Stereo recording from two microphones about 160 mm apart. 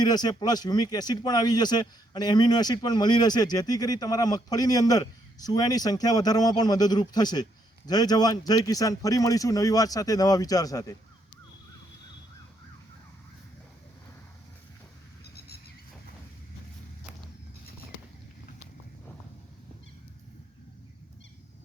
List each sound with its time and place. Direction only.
0.0 s speech: 25° left (ahead or behind)